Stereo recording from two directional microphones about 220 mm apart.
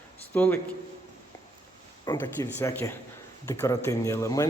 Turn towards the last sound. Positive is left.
turn(degrees=15)  # may be behind; listen again after turning